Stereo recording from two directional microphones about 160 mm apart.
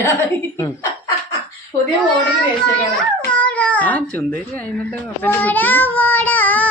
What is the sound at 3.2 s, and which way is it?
Speech, 10° left (ahead or behind).